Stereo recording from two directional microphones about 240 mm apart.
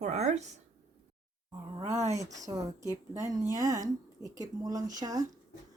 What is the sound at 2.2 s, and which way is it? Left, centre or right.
A woman's voice, centre.